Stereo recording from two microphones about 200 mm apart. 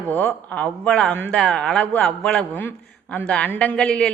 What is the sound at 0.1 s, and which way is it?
A woman's voice, 10° left (ahead or behind).